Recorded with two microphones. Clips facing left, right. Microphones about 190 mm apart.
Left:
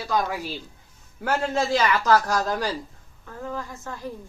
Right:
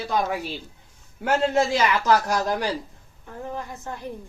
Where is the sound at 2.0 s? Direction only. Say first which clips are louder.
Even; 20° right (ahead or behind).